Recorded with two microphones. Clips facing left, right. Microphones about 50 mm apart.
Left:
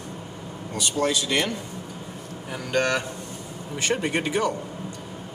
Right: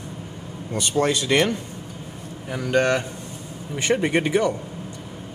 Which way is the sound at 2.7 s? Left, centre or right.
Right.